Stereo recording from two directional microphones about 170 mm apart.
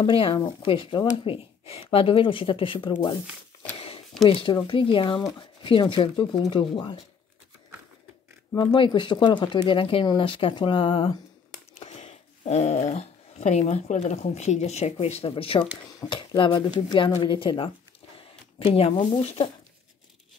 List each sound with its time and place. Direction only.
0.0 s speech: 30° left (ahead or behind)
3.7 s a sound: 35° left (ahead or behind)
4.3 s speech: 30° left (ahead or behind)
8.5 s speech: 30° left (ahead or behind)
18.7 s speech: 35° left (ahead or behind)